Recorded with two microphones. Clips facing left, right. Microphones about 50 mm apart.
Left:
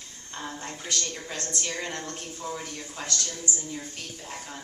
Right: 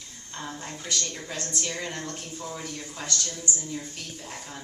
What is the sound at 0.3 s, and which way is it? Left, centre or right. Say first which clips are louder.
A woman's voice: even; centre.